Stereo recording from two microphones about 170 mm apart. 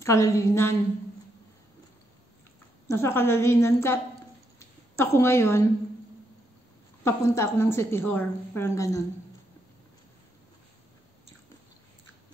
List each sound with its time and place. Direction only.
0.0 s a woman's voice: 15° left (ahead or behind)
2.9 s a woman's voice: 15° left (ahead or behind)
4.6 s a sound: 15° left (ahead or behind)
7.1 s a woman's voice: 15° left (ahead or behind)